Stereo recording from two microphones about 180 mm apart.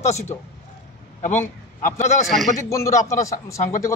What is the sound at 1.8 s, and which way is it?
Speech, 45° left (ahead or behind).